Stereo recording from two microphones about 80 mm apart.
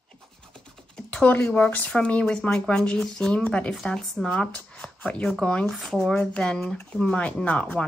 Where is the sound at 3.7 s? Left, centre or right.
Centre.